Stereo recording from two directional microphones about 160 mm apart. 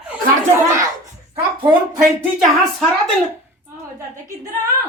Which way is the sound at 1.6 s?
30° right (ahead or behind).